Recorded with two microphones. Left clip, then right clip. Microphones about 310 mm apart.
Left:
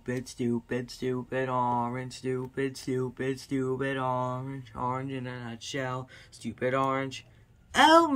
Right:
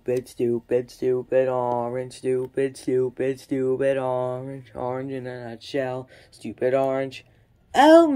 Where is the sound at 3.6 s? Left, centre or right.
Left.